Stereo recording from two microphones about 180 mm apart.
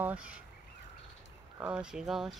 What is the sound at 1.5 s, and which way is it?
Speech, 5° right (ahead or behind).